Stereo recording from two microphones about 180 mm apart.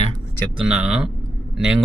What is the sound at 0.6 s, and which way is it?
Speech, 5° right (ahead or behind).